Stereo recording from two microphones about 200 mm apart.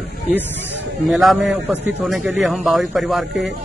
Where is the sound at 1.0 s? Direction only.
Centre (ahead or behind).